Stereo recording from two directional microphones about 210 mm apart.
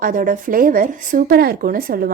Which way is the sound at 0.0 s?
40° right (ahead or behind).